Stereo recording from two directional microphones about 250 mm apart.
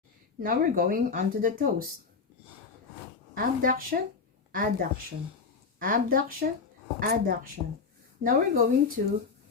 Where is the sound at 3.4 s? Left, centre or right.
Right.